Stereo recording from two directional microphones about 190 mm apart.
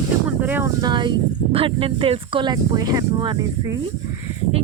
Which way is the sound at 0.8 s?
25° right (ahead or behind).